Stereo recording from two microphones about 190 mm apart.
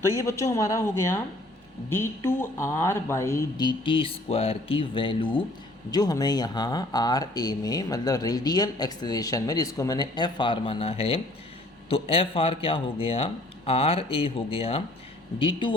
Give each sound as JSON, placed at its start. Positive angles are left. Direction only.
{"t": 0.2, "sound": "a woman's voice", "side_deg": 15}